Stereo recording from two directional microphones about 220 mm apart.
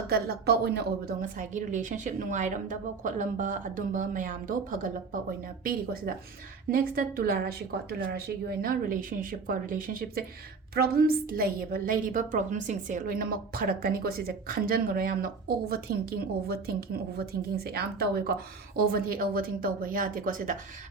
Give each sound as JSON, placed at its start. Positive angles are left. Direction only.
{"t": 0.1, "sound": "a woman's voice", "side_deg": -45}